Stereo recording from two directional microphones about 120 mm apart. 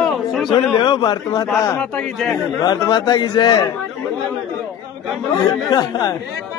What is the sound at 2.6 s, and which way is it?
A man's voice, 35° left (ahead or behind).